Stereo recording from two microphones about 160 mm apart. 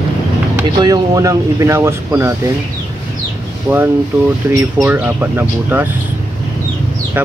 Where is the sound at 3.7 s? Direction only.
10° right (ahead or behind).